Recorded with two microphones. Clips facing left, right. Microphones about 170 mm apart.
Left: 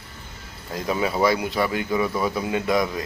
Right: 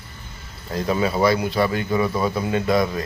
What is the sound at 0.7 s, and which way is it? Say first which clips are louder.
Speech: right 3 dB; 15° left (ahead or behind).